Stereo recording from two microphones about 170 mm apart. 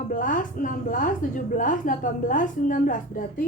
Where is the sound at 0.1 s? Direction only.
50° left (ahead or behind).